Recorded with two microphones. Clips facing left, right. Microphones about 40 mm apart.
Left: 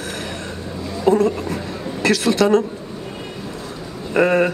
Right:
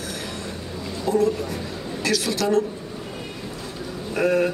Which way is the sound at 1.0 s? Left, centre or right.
Left.